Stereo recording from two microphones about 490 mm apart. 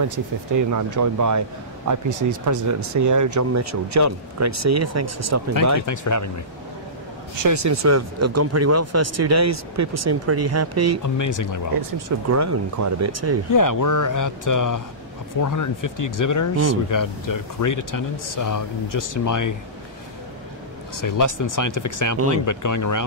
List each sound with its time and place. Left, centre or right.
0.0 s speech: right
5.9 s speech: left
7.4 s speech: right
11.0 s speech: left
12.3 s speech: right
13.5 s speech: left
20.9 s speech: left